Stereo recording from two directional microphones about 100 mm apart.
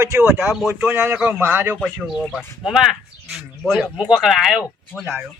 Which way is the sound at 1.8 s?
5° right (ahead or behind).